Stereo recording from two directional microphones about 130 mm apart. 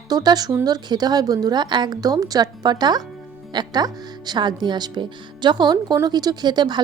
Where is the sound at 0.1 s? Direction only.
30° right (ahead or behind).